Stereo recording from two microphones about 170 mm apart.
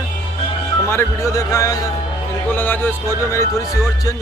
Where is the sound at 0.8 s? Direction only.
15° left (ahead or behind).